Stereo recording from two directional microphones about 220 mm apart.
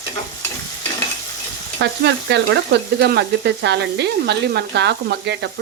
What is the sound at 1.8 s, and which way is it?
Frying, 50° right (ahead or behind).